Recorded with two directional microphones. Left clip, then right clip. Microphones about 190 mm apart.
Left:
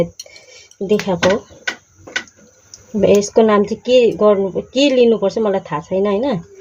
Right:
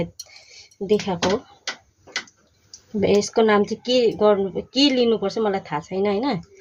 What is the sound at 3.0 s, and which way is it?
A woman's voice, 20° right (ahead or behind).